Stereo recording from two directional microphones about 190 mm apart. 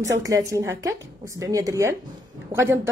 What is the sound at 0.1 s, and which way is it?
Speech, 15° right (ahead or behind).